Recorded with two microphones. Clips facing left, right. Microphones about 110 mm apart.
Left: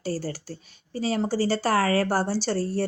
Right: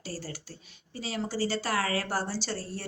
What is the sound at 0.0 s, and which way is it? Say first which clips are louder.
Speech: left 9 dB; 40° left (ahead or behind).